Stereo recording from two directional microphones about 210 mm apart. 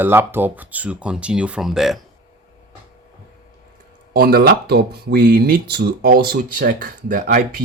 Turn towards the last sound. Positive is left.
turn(degrees=-40)  # may be behind; listen again after turning